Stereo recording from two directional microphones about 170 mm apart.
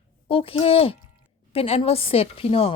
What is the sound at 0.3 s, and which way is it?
A woman's voice, 35° left (ahead or behind).